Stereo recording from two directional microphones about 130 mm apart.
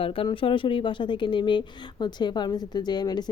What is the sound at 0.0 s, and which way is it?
Speech, 45° left (ahead or behind).